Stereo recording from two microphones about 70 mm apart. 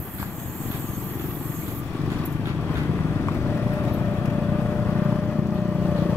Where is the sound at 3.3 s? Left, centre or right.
Left.